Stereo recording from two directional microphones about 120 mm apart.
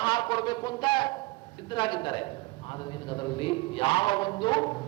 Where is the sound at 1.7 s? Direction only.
40° left (ahead or behind).